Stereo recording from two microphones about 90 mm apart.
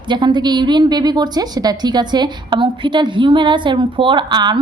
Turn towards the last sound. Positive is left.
turn(degrees=-55)  # may be behind; listen again after turning